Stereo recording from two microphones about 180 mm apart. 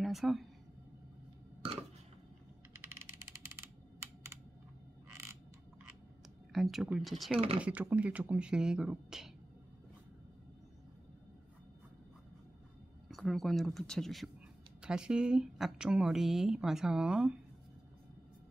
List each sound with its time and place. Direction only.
0.0 s speech: centre (ahead or behind)
6.5 s speech: centre (ahead or behind)
7.3 s speech: 30° right (ahead or behind)
7.6 s speech: 10° right (ahead or behind)
13.1 s speech: centre (ahead or behind)